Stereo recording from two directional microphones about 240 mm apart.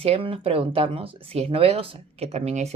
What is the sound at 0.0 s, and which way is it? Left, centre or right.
Speech, right.